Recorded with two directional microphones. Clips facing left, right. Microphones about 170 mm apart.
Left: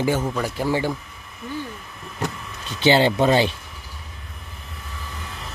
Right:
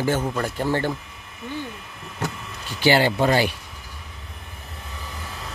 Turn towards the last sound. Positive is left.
turn(degrees=20)  # may be behind; listen again after turning